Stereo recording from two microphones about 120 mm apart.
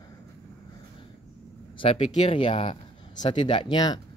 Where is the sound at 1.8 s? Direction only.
55° left (ahead or behind); by 3.9 s 35° left (ahead or behind).